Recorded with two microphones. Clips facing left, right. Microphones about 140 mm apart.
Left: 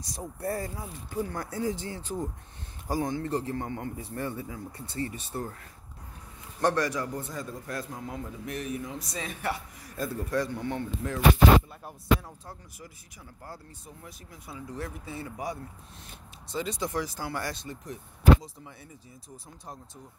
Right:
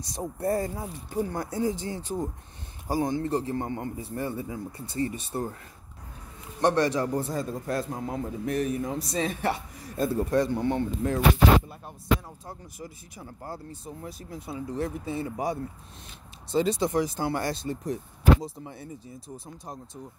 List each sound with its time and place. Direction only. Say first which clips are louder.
0.0 s a man's voice: right 5 dB; 20° right (ahead or behind)
1.8 s speech: right 3 dB; 15° right (ahead or behind)
4.2 s speech: right 3 dB; 15° right (ahead or behind)
6.6 s a man's voice: right 4 dB; 25° right (ahead or behind)
12.4 s a man's voice: right 5 dB; 20° right (ahead or behind)